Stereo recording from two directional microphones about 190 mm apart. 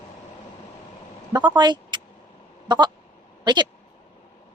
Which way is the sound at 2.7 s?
20° right (ahead or behind).